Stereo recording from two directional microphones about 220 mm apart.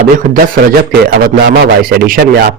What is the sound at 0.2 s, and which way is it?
A man's voice, 40° right (ahead or behind).